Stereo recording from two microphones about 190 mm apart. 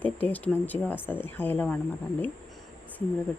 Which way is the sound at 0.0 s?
10° left (ahead or behind).